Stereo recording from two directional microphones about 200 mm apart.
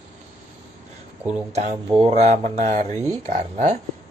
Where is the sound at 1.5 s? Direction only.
35° right (ahead or behind).